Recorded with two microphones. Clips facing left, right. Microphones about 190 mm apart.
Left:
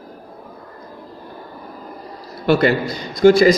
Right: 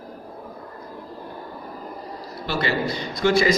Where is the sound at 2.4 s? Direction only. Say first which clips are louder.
Left 11 dB; 55° left (ahead or behind).